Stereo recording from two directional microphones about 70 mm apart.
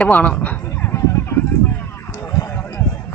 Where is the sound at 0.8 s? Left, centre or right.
Left.